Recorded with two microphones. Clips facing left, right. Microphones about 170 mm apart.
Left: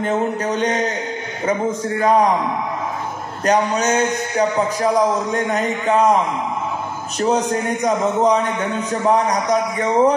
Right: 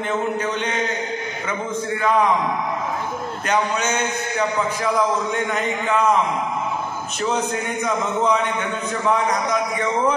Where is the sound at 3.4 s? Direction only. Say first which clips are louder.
Left 5 dB; 40° left (ahead or behind).